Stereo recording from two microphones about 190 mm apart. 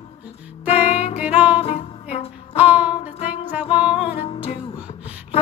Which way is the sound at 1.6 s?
30° left (ahead or behind).